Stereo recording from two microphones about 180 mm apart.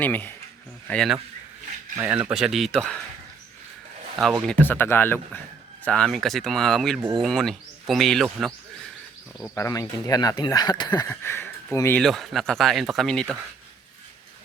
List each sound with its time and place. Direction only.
0.0 s speech: 10° left (ahead or behind)
2.0 s speech: 10° right (ahead or behind)
4.2 s speech: centre (ahead or behind)
9.4 s speech: 15° left (ahead or behind)
11.9 s speech: centre (ahead or behind)